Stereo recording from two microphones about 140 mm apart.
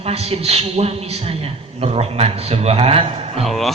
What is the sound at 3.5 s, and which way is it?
Speech, centre (ahead or behind).